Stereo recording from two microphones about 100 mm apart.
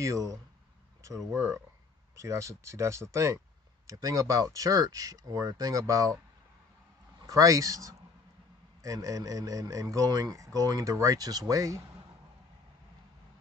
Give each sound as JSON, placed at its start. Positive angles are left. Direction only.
{"t": 0.0, "sound": "speech", "side_deg": -35}
{"t": 7.2, "sound": "speech", "side_deg": -35}